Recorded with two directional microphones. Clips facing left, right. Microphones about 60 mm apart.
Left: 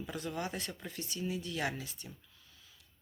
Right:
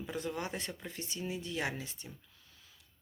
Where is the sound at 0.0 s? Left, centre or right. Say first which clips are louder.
Right 1 dB; right.